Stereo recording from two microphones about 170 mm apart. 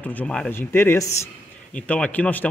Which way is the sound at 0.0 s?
10° left (ahead or behind).